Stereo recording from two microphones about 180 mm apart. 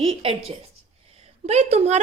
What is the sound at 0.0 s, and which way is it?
A woman's voice, 30° right (ahead or behind).